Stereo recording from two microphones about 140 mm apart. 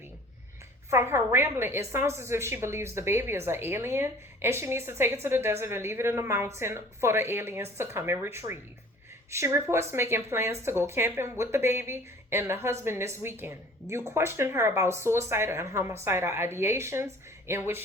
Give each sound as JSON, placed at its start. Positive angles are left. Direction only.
{"t": 0.9, "sound": "a woman's voice", "side_deg": -20}